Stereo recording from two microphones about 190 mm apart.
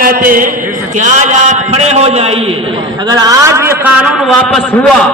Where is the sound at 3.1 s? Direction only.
20° right (ahead or behind); by 4.6 s centre (ahead or behind).